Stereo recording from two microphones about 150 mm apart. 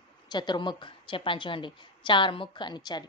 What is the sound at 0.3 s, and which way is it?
A woman's voice, 30° left (ahead or behind).